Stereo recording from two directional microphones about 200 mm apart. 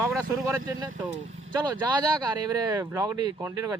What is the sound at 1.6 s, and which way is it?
Speech, 20° right (ahead or behind).